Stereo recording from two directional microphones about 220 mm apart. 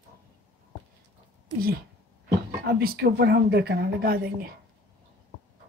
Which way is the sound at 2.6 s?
45° right (ahead or behind).